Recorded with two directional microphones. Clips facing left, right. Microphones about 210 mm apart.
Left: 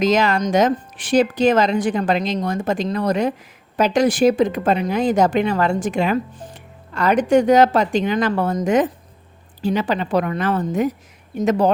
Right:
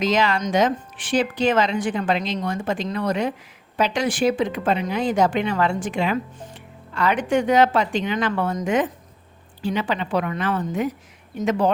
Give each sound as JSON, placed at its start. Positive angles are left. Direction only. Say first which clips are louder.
{"t": 0.0, "sound": "speech", "louder": "left 4 dB", "side_deg": 45}